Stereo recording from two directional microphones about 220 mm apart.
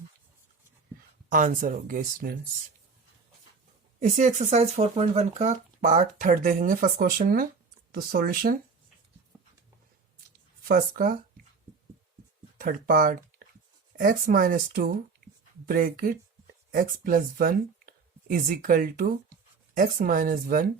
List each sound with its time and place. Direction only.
1.3 s speech: 40° right (ahead or behind)
4.0 s speech: 35° right (ahead or behind)
9.3 s a sound: 10° right (ahead or behind)
10.6 s speech: 40° right (ahead or behind)
12.5 s speech: 40° right (ahead or behind)